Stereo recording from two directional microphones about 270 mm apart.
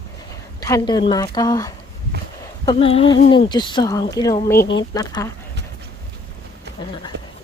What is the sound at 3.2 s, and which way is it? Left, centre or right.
Speech, centre.